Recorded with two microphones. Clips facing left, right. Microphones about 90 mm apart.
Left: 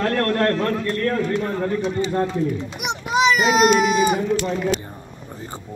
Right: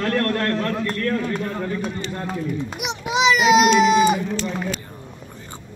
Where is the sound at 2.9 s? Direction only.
45° left (ahead or behind).